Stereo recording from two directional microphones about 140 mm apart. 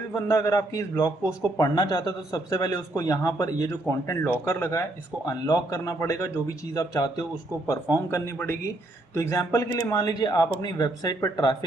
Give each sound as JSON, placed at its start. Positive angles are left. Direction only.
{"t": 0.1, "sound": "a man's voice", "side_deg": 20}